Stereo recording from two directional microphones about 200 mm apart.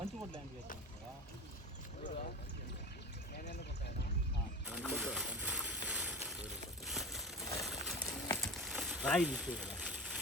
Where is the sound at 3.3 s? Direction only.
50° left (ahead or behind).